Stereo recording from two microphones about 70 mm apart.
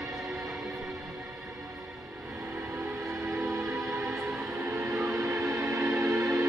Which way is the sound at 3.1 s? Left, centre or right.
Right.